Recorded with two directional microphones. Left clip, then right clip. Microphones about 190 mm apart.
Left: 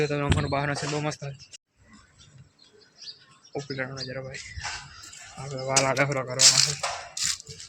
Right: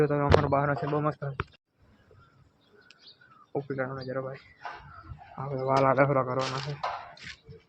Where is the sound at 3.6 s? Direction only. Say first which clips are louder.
Left 3 dB; 10° left (ahead or behind).